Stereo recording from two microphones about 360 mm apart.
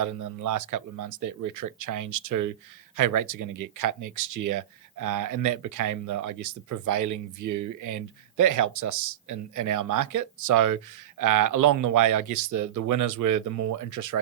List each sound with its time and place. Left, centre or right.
0.0 s speech: right